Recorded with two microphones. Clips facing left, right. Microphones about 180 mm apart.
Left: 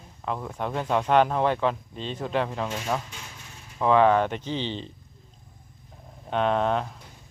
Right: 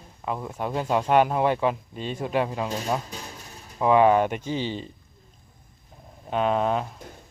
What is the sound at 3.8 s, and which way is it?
Speech, 10° right (ahead or behind).